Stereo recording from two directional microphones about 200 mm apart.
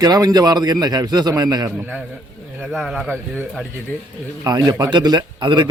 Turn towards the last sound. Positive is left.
turn(degrees=-20)  # may be behind; listen again after turning